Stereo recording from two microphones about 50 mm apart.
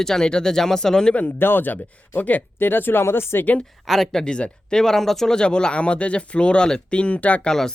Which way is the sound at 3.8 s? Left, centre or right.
Centre.